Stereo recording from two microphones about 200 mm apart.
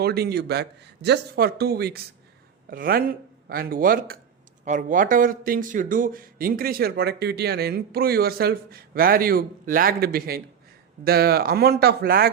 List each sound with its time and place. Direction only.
0.0 s speech: 50° right (ahead or behind)